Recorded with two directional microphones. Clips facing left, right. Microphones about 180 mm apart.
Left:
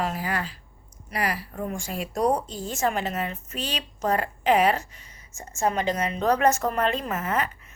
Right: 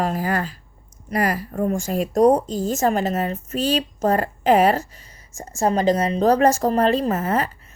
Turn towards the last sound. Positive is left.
turn(degrees=-35)  # may be behind; listen again after turning